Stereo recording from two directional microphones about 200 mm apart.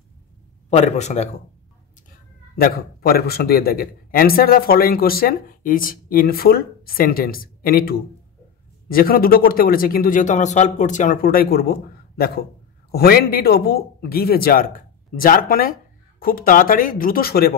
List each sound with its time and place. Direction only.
0.7 s a man's voice: 35° left (ahead or behind)
2.0 s a man's voice: 50° left (ahead or behind)
12.9 s a man's voice: 50° left (ahead or behind)